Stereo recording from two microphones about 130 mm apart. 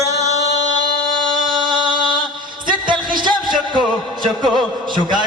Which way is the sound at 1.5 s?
35° right (ahead or behind).